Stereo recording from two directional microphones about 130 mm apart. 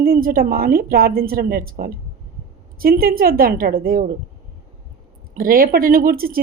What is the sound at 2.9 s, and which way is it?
Speech, 90° right.